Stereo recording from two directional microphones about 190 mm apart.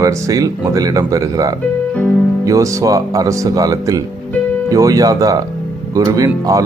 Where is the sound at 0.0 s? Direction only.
20° right (ahead or behind).